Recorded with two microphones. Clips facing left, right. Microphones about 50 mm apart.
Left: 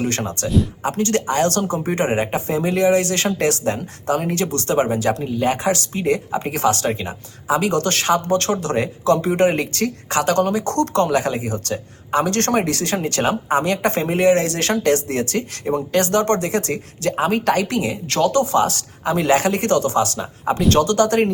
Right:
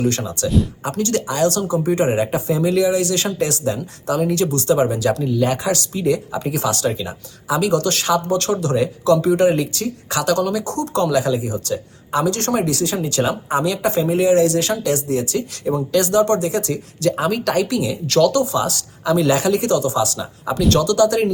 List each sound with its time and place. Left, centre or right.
0.1 s speech: left